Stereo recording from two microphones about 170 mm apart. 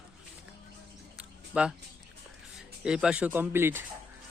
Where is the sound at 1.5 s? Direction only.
5° right (ahead or behind).